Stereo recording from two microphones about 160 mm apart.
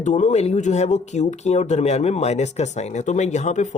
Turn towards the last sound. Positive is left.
turn(degrees=50)  # may be behind; listen again after turning